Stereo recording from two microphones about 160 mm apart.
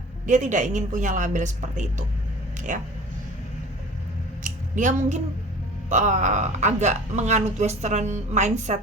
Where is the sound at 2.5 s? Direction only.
50° right (ahead or behind).